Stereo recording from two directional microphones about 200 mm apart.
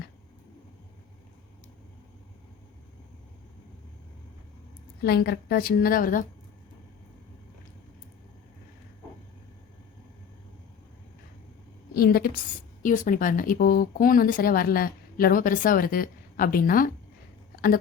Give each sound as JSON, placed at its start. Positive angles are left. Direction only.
{"t": 5.0, "sound": "speech", "side_deg": 50}
{"t": 11.9, "sound": "a woman's voice", "side_deg": 50}